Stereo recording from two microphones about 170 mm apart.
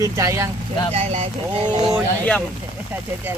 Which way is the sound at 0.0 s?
20° right (ahead or behind).